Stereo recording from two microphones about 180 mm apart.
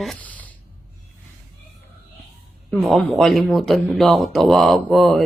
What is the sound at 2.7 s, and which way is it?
Speech, centre (ahead or behind).